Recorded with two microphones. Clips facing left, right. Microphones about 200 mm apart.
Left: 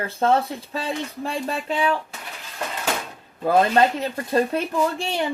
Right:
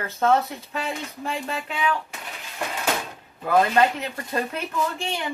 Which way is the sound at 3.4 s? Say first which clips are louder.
Left 2 dB; 35° left (ahead or behind).